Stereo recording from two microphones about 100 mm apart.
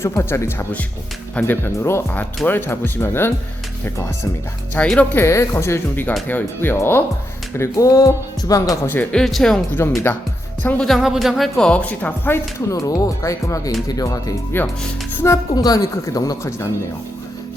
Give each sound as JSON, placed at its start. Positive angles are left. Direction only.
{"t": 0.0, "sound": "speech", "side_deg": 25}
{"t": 4.8, "sound": "speech", "side_deg": 15}
{"t": 5.1, "sound": "speech", "side_deg": 25}
{"t": 7.6, "sound": "speech", "side_deg": 35}
{"t": 9.1, "sound": "speech", "side_deg": 5}
{"t": 9.8, "sound": "speech", "side_deg": 25}
{"t": 10.6, "sound": "speech", "side_deg": 15}
{"t": 10.8, "sound": "speech", "side_deg": 0}
{"t": 12.7, "sound": "speech", "side_deg": 35}
{"t": 14.5, "sound": "speech", "side_deg": 20}
{"t": 15.5, "sound": "speech", "side_deg": 40}